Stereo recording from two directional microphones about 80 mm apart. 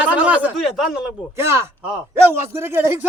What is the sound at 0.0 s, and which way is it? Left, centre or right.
Speech, centre.